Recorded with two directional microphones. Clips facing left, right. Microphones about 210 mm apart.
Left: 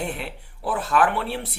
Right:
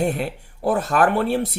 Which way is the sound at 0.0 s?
45° right (ahead or behind).